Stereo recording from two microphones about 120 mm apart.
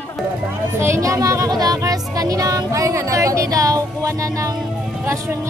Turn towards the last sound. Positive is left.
turn(degrees=-20)  # may be behind; listen again after turning